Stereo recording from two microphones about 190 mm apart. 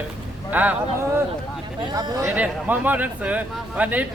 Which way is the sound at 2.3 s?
5° right (ahead or behind).